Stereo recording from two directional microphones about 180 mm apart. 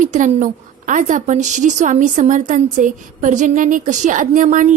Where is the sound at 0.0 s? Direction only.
45° right (ahead or behind).